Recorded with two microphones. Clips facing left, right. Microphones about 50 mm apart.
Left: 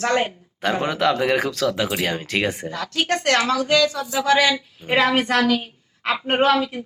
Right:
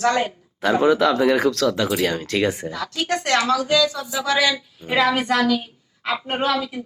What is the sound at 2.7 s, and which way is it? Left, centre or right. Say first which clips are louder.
A woman's voice: left 1 dB; left.